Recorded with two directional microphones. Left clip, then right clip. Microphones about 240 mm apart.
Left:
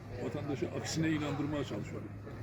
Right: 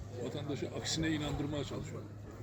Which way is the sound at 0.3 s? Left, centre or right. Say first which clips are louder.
Left 4 dB; left.